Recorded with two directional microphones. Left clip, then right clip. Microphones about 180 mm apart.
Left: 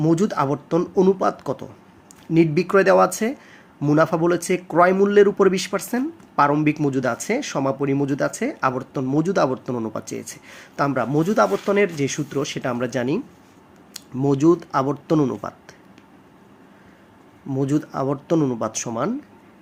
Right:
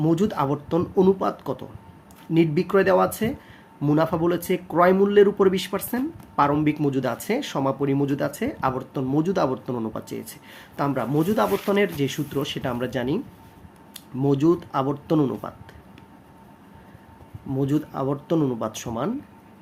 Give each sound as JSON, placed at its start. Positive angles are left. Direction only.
{"t": 0.0, "sound": "speech", "side_deg": 15}
{"t": 17.5, "sound": "speech", "side_deg": 10}